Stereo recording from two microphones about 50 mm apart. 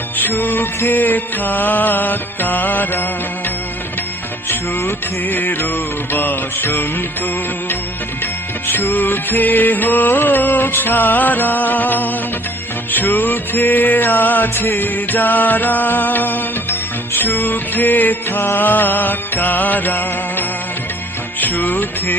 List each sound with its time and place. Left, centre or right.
0.2 s music: left
4.4 s music: left
5.2 s music: left
8.2 s music: left
21.4 s music: left